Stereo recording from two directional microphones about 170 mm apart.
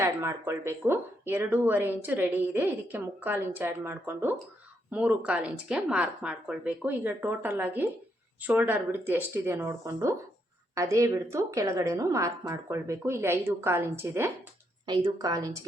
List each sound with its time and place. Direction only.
0.0 s speech: 15° right (ahead or behind)
14.8 s speech: 25° right (ahead or behind)